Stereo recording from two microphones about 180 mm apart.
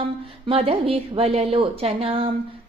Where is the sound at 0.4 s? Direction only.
30° right (ahead or behind).